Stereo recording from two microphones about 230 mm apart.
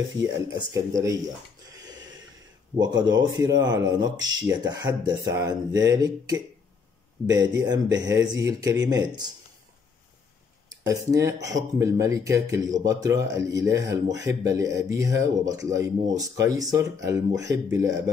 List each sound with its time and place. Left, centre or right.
0.6 s speech: centre
2.8 s speech: centre
10.9 s speech: centre